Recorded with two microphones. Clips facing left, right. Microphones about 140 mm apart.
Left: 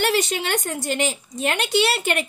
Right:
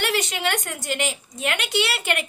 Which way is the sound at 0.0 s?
35° left (ahead or behind).